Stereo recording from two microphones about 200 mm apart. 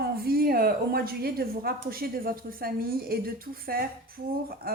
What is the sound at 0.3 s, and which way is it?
A woman's voice, 50° right (ahead or behind).